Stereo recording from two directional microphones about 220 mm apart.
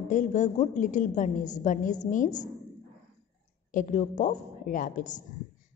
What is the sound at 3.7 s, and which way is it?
A woman's voice, 35° left (ahead or behind).